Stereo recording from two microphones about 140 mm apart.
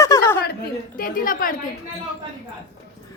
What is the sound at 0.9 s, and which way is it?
Speech, 85° left.